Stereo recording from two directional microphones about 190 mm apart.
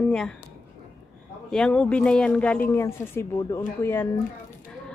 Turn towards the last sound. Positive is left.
turn(degrees=10)  # may be behind; listen again after turning